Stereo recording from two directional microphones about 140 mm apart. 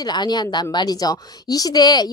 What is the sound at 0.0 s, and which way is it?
A woman's voice, 30° left (ahead or behind).